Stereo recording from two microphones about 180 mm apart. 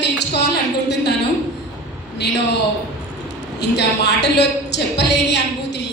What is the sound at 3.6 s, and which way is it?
A woman's voice, 70° left (ahead or behind).